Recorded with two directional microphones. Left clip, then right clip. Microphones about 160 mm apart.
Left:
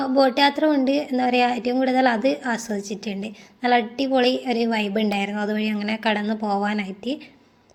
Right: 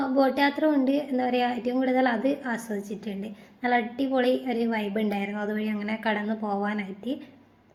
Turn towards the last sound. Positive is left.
turn(degrees=30)  # may be behind; listen again after turning